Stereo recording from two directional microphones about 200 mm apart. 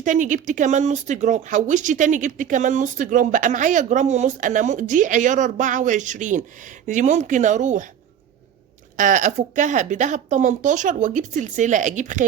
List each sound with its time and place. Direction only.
0.0 s speech: 40° right (ahead or behind)
9.0 s speech: 40° right (ahead or behind)